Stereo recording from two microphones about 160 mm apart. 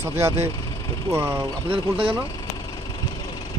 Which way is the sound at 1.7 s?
35° right (ahead or behind).